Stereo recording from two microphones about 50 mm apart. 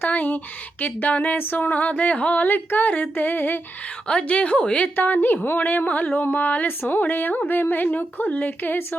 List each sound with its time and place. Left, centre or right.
0.0 s speech: left
4.0 s a woman's voice: left
4.9 s speech: left